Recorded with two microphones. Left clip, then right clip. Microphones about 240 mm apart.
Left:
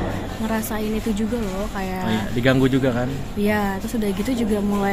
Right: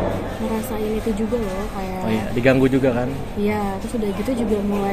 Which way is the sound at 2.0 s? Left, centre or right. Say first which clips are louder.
Right 3 dB; left.